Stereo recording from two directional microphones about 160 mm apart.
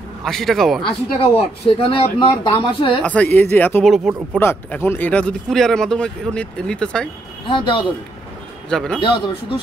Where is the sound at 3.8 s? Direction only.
Centre (ahead or behind).